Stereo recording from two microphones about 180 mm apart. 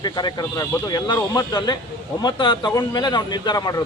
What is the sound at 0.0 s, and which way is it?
Speech, 25° left (ahead or behind).